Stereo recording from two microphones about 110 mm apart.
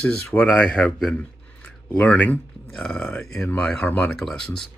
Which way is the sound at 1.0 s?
15° left (ahead or behind).